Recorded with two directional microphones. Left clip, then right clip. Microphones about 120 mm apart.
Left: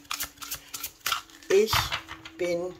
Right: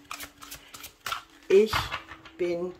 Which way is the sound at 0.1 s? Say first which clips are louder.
Left 6 dB; 10° right (ahead or behind).